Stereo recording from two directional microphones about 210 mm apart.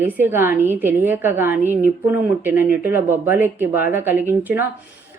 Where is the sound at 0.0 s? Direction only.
10° right (ahead or behind).